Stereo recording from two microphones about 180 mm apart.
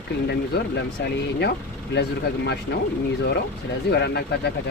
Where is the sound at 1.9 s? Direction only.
75° left (ahead or behind).